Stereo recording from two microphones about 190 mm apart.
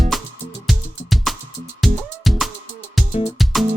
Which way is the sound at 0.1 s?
Centre (ahead or behind).